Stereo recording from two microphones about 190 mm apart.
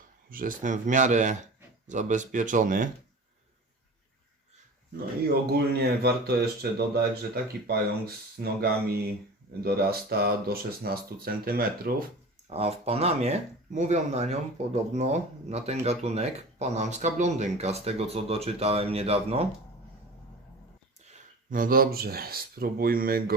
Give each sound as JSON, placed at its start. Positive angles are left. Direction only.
{"t": 0.3, "sound": "speech", "side_deg": -45}
{"t": 5.3, "sound": "speech", "side_deg": -55}
{"t": 12.5, "sound": "speech", "side_deg": -35}
{"t": 21.1, "sound": "speech", "side_deg": -45}